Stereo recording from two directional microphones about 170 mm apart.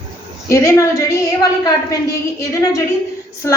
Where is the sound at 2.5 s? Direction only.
20° left (ahead or behind).